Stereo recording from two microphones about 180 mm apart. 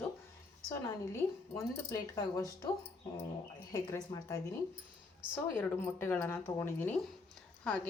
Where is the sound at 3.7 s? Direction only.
20° left (ahead or behind).